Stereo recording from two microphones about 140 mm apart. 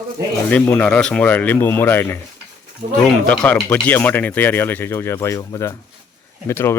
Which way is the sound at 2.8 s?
45° right (ahead or behind).